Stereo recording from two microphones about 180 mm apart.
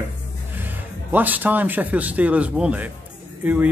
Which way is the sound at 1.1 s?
10° right (ahead or behind).